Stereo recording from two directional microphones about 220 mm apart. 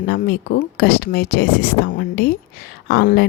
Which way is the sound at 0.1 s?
45° left (ahead or behind).